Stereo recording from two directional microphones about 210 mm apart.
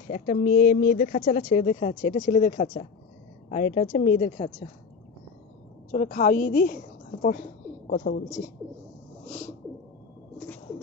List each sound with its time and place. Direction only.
0.1 s speech: 40° left (ahead or behind)
5.9 s a woman's voice: 40° left (ahead or behind)